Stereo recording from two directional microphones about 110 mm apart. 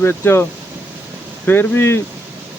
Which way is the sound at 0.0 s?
20° left (ahead or behind).